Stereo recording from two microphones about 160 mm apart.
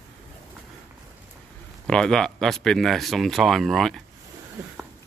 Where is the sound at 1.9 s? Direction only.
5° left (ahead or behind).